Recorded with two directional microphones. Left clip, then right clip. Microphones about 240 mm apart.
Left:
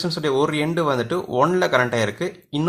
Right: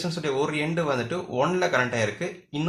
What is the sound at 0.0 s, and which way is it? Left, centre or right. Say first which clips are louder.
Speech: left 6 dB; left.